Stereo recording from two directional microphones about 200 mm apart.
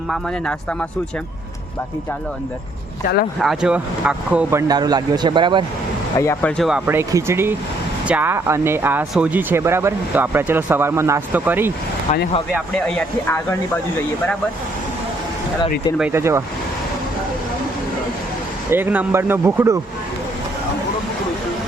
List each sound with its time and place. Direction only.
0.1 s speech: 5° left (ahead or behind)
3.4 s speech: 5° right (ahead or behind)
4.7 s speech: 20° right (ahead or behind)
6.1 s speech: 15° left (ahead or behind)
6.6 s speech: 5° right (ahead or behind)
12.5 s speech: 5° left (ahead or behind)
16.0 s speech: 10° right (ahead or behind)
18.7 s speech: 10° right (ahead or behind)